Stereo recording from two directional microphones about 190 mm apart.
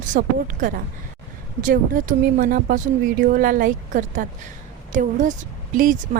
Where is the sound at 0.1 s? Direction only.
45° right (ahead or behind).